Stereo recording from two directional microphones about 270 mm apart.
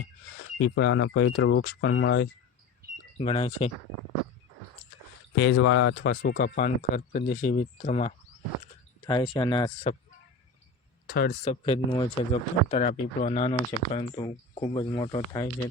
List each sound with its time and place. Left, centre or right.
0.6 s speech: left
3.2 s speech: centre
5.3 s speech: left
11.0 s a sound: left
11.4 s speech: left